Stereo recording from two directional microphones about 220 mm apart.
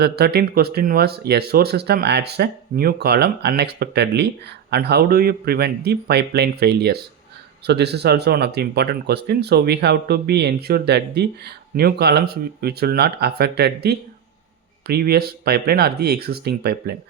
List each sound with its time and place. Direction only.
0.0 s speech: 45° right (ahead or behind)